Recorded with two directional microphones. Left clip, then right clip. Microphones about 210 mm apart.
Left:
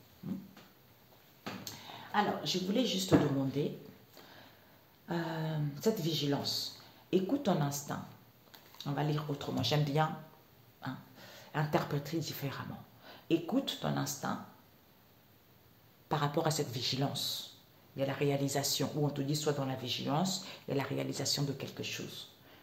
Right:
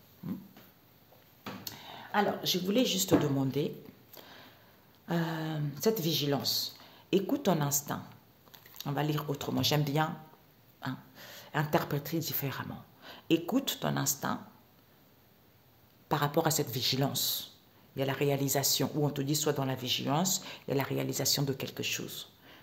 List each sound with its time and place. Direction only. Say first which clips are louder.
2.1 s speech: right 3 dB; 50° right (ahead or behind)
5.0 s speech: right 3 dB; 45° right (ahead or behind)
16.1 s speech: right 3 dB; 35° right (ahead or behind)